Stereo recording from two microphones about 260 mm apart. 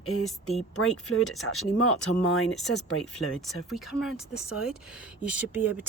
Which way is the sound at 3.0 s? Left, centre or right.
Centre.